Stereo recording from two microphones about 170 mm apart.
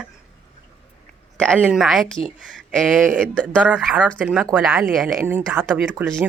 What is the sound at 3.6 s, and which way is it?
Speech, 5° right (ahead or behind).